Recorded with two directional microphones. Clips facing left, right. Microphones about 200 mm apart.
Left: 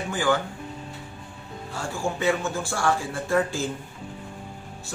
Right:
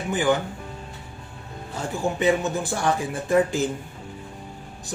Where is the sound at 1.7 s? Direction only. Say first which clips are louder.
Right 3 dB; 20° right (ahead or behind).